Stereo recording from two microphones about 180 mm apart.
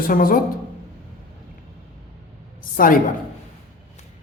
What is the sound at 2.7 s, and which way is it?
Speech, 50° left (ahead or behind).